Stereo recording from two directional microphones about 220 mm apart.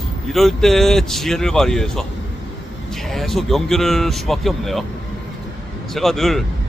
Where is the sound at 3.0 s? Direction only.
Centre (ahead or behind).